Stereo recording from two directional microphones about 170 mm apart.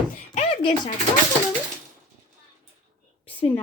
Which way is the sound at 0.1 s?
45° left (ahead or behind).